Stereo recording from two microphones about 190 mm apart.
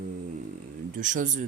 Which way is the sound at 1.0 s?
40° right (ahead or behind).